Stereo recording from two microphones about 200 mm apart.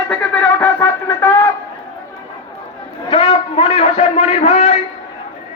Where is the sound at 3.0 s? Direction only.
20° left (ahead or behind).